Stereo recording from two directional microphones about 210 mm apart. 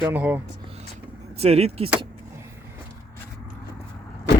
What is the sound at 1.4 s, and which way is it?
Speech, 30° right (ahead or behind).